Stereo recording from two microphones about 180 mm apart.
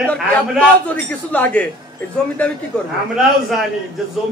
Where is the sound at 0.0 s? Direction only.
5° left (ahead or behind).